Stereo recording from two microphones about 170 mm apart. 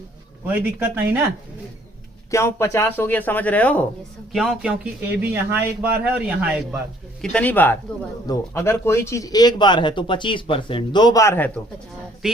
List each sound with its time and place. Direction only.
0.4 s speech: 10° right (ahead or behind)
2.3 s speech: 15° left (ahead or behind)
4.3 s speech: 5° right (ahead or behind)
7.2 s speech: 5° left (ahead or behind)
12.2 s a sound: 5° right (ahead or behind)